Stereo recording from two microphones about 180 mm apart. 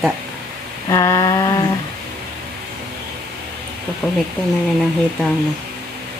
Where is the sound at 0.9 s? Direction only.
20° left (ahead or behind).